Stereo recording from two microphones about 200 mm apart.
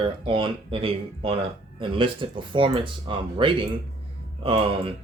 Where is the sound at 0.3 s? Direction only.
25° right (ahead or behind).